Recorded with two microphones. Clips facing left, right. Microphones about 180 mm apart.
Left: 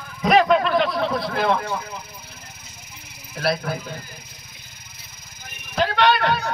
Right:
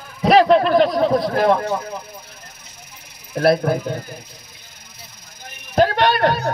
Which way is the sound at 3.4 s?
50° right (ahead or behind).